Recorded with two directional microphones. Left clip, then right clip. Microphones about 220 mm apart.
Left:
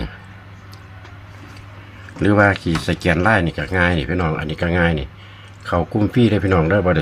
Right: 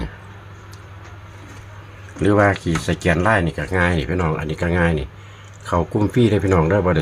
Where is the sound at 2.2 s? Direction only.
5° left (ahead or behind).